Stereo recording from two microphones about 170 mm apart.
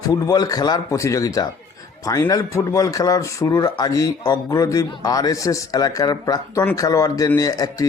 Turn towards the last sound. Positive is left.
turn(degrees=20)  # may be behind; listen again after turning